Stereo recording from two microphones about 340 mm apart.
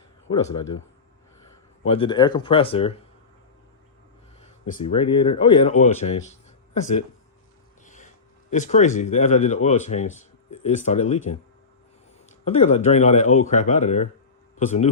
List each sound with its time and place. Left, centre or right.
0.3 s speech: centre
1.8 s speech: centre
4.4 s speech: centre
7.9 s a sound: left
9.0 s speech: centre
12.2 s a man's voice: centre